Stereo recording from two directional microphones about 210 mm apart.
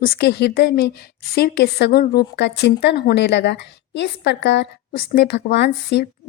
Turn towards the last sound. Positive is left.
turn(degrees=50)  # may be behind; listen again after turning